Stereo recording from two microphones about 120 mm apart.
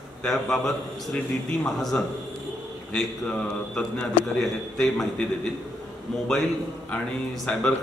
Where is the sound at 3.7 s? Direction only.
10° left (ahead or behind).